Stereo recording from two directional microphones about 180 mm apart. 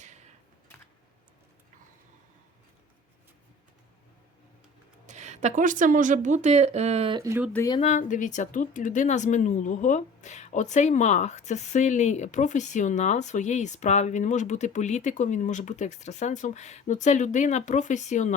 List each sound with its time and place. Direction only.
0.0 s computer keyboard: 40° right (ahead or behind)
5.0 s a woman's voice: 40° right (ahead or behind)
7.2 s speech: 15° right (ahead or behind)
7.8 s a woman's voice: 40° left (ahead or behind)